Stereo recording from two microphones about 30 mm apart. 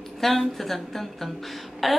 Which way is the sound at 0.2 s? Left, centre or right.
Centre.